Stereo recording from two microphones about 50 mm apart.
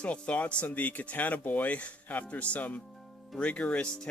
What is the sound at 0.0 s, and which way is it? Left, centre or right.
Speech, left.